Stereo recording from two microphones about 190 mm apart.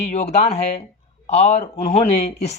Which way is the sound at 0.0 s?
35° left (ahead or behind).